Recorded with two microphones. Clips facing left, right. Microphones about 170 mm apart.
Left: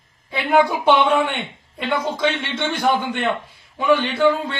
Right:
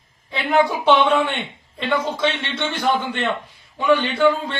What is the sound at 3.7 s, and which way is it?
Speech, 10° left (ahead or behind).